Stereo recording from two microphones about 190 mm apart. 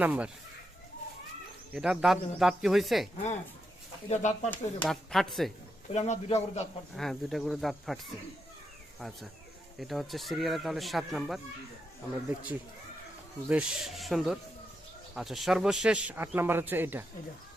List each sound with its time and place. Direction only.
0.0 s a man's voice: 10° right (ahead or behind)
1.7 s speech: 5° right (ahead or behind)
4.1 s a man's voice: 40° left (ahead or behind)
4.5 s speech: 5° left (ahead or behind)
5.9 s a man's voice: 35° left (ahead or behind)
6.9 s speech: centre (ahead or behind)
9.0 s a man's voice: centre (ahead or behind)
13.5 s a man's voice: 5° right (ahead or behind)